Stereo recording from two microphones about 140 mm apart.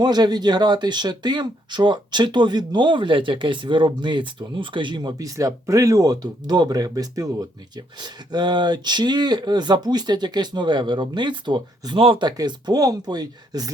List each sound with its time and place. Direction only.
0.0 s speech: 30° right (ahead or behind)
12.4 s speech: 30° right (ahead or behind)